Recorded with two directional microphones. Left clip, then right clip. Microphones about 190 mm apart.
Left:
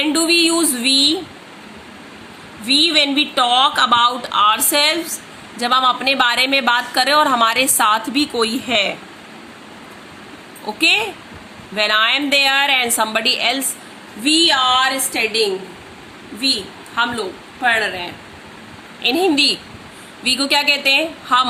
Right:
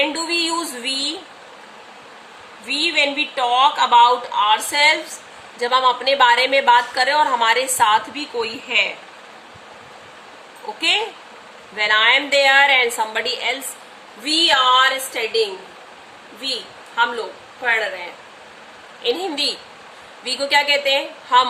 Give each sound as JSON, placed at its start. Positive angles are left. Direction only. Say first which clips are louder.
{"t": 0.0, "sound": "a sound", "louder": "left 5 dB", "side_deg": 15}
{"t": 2.6, "sound": "a woman's voice", "louder": "left 4 dB", "side_deg": 20}
{"t": 8.2, "sound": "a woman's voice", "louder": "left 6 dB", "side_deg": 30}
{"t": 10.8, "sound": "a woman's voice", "louder": "left 4 dB", "side_deg": 15}